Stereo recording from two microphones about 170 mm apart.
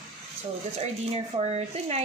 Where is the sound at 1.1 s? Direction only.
40° right (ahead or behind).